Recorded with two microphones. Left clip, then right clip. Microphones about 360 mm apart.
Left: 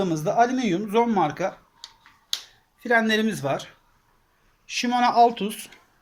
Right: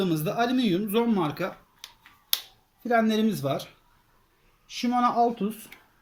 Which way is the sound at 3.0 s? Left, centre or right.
Left.